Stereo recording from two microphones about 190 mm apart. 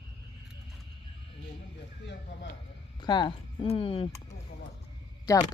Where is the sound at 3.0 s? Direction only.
25° left (ahead or behind).